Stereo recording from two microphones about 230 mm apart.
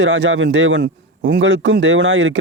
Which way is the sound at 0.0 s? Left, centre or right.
Right.